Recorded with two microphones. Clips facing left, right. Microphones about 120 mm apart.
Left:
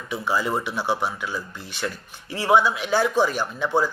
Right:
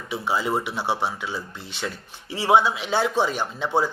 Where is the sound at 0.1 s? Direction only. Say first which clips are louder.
Even; 20° right (ahead or behind).